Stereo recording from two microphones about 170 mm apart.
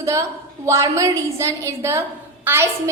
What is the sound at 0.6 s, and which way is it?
A woman's voice, 20° right (ahead or behind).